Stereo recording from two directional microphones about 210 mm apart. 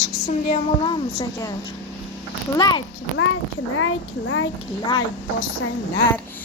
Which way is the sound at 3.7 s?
70° left (ahead or behind).